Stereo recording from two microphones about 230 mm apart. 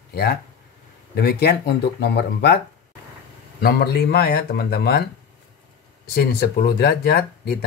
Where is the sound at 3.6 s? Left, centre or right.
Left.